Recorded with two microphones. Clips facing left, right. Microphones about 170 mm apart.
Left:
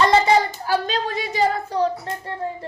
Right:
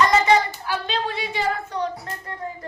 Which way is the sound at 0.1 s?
35° left (ahead or behind).